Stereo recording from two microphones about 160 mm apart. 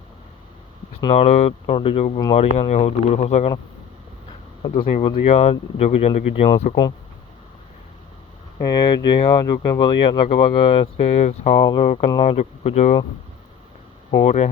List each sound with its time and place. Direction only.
1.1 s speech: 40° left (ahead or behind)
4.6 s speech: 35° left (ahead or behind)
8.5 s speech: 25° left (ahead or behind); by 13.0 s 45° left (ahead or behind)
14.1 s speech: 40° left (ahead or behind)